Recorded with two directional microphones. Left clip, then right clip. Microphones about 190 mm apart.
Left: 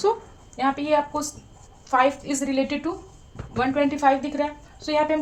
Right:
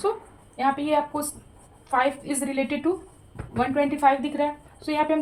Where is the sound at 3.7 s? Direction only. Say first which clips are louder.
Even; 35° left (ahead or behind).